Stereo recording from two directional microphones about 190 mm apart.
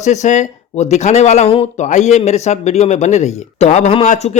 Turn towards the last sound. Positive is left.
turn(degrees=35)  # may be behind; listen again after turning